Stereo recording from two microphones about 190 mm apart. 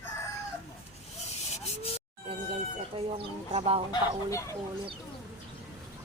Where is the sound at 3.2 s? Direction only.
30° right (ahead or behind).